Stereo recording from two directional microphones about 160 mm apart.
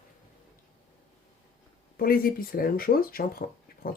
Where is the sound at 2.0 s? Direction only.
65° left (ahead or behind).